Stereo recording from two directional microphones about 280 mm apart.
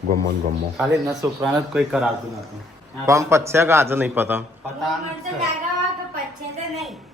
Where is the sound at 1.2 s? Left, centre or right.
Centre.